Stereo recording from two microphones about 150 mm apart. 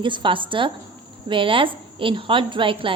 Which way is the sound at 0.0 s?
35° right (ahead or behind).